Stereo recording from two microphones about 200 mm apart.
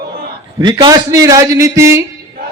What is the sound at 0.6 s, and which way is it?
A man's voice, 20° right (ahead or behind).